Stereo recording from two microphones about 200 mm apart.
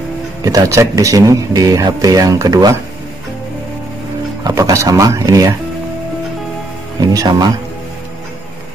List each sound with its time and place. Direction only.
0.4 s speech: 15° right (ahead or behind)
4.5 s speech: 15° right (ahead or behind)
7.0 s speech: 20° right (ahead or behind)